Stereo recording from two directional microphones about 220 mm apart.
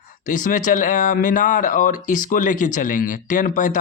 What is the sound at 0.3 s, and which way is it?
A man's voice, 35° left (ahead or behind).